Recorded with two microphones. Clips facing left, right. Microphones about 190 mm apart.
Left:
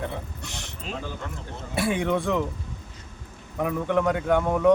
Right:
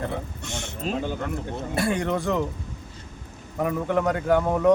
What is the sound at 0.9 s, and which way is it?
Speech, 40° right (ahead or behind).